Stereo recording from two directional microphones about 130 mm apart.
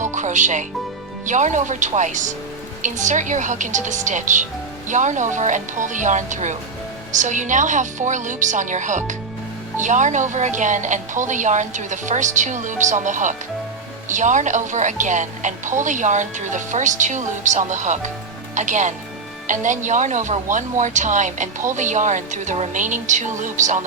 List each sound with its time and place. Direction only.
0.0 s music: 70° right (ahead or behind)
1.2 s a woman's voice: 70° right (ahead or behind)